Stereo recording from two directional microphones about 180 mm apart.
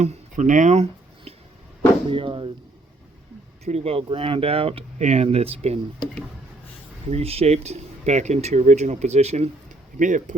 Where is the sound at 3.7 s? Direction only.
35° right (ahead or behind).